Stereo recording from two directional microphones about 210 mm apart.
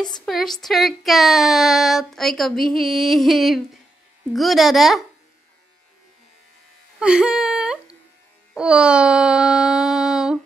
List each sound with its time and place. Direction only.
0.2 s speech: centre (ahead or behind)
7.0 s whimper: 5° right (ahead or behind)
8.5 s a sound: 5° right (ahead or behind)